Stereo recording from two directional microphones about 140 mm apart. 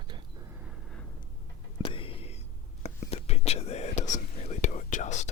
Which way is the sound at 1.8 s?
40° left (ahead or behind).